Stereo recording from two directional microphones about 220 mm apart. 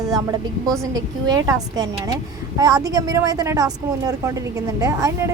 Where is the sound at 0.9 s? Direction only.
15° right (ahead or behind).